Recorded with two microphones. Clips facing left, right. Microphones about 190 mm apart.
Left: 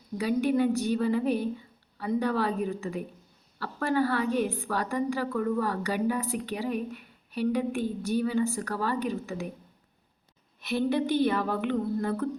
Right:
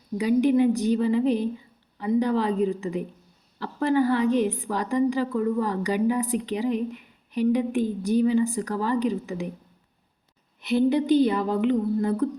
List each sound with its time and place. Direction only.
0.2 s a woman's voice: 15° right (ahead or behind)
10.6 s a woman's voice: 15° right (ahead or behind)